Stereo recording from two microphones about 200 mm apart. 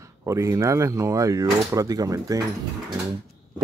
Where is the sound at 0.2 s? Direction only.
15° right (ahead or behind).